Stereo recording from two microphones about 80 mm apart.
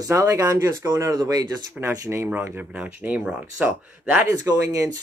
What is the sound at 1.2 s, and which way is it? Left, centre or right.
Speech, right.